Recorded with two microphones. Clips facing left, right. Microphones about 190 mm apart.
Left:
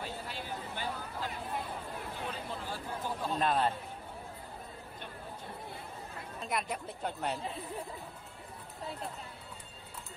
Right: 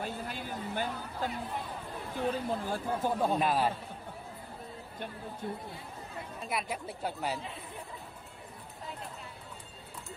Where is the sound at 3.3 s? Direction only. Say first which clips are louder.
Right 2 dB; 5° right (ahead or behind).